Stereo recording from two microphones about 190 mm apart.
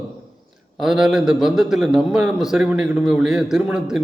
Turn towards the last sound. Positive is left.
turn(degrees=-5)  # may be behind; listen again after turning